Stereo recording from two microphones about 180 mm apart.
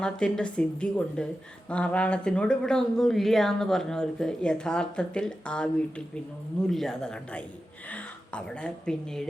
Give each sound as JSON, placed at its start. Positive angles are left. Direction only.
{"t": 0.0, "sound": "speech", "side_deg": 5}
{"t": 6.7, "sound": "speech", "side_deg": 0}